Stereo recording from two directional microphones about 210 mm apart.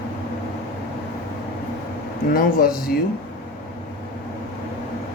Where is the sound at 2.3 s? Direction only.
45° left (ahead or behind).